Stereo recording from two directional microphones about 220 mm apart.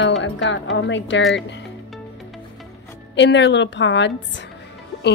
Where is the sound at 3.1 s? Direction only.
55° left (ahead or behind).